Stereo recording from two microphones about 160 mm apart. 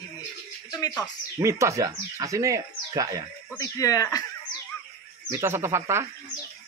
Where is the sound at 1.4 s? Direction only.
20° right (ahead or behind).